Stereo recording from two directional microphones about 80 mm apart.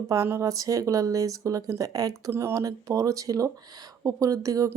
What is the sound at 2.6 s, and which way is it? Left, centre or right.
Speech, right.